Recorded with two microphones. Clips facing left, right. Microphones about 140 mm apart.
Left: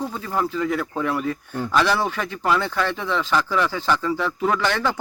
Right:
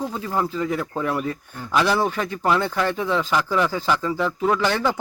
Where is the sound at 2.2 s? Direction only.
20° right (ahead or behind).